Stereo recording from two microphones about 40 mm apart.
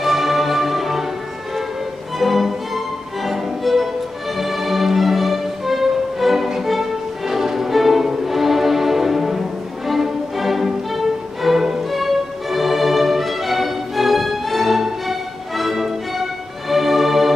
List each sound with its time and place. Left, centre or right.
0.0 s music: centre
2.1 s music: centre